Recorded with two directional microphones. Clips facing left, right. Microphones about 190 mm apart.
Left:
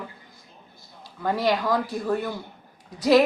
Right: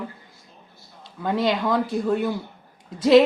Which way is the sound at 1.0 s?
20° right (ahead or behind).